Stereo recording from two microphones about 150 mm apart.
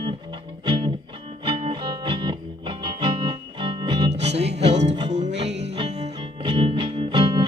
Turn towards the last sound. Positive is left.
turn(degrees=-30)  # may be behind; listen again after turning